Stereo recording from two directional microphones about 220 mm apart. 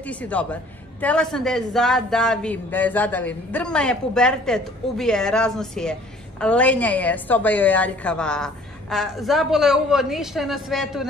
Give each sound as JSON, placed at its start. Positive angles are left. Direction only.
{"t": 0.0, "sound": "a woman's voice", "side_deg": 5}